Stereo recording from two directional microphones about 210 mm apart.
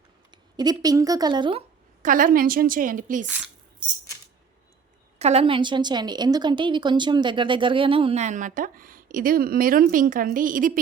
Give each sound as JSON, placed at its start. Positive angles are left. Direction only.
{"t": 0.5, "sound": "a woman's voice", "side_deg": -20}
{"t": 2.0, "sound": "a woman's voice", "side_deg": -40}
{"t": 5.2, "sound": "a woman's voice", "side_deg": -30}